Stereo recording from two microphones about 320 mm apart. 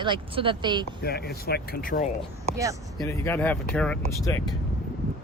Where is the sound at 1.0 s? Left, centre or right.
Left.